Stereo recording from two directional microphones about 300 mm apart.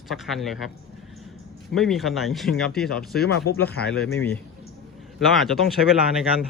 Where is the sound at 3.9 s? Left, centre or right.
Centre.